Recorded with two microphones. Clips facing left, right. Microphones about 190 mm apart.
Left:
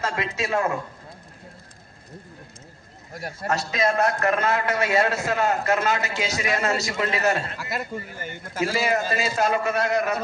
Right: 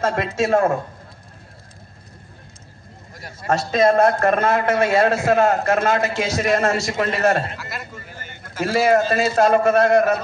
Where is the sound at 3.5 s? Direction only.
50° right (ahead or behind).